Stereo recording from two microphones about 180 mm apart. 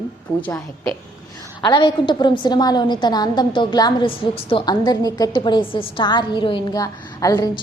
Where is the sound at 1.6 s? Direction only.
25° left (ahead or behind).